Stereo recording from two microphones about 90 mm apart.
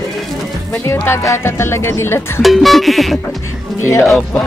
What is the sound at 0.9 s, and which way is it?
Speech, 30° left (ahead or behind).